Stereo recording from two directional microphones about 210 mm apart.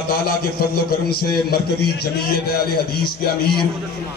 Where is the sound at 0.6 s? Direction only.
45° left (ahead or behind).